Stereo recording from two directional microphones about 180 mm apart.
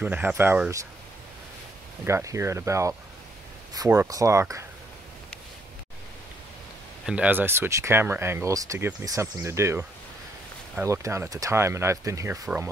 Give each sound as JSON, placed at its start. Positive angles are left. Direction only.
{"t": 0.0, "sound": "speech", "side_deg": -10}
{"t": 2.0, "sound": "speech", "side_deg": -15}
{"t": 7.1, "sound": "speech", "side_deg": -10}